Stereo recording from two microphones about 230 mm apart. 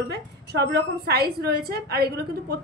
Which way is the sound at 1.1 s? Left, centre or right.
Right.